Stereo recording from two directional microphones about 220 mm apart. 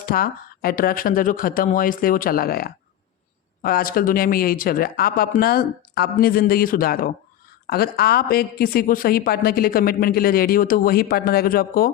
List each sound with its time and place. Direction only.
0.0 s a woman's voice: 40° left (ahead or behind)